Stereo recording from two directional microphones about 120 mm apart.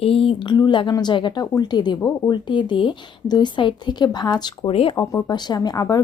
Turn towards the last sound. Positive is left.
turn(degrees=35)  # may be behind; listen again after turning